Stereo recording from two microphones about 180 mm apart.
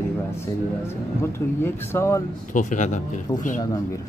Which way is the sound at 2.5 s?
45° left (ahead or behind).